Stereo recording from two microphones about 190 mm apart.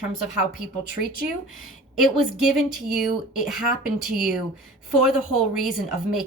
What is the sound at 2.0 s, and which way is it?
A woman's voice, centre (ahead or behind).